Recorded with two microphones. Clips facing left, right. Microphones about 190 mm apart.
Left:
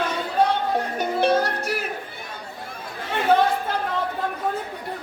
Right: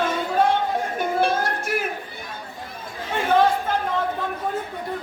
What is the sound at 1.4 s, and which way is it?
Music, 50° right (ahead or behind).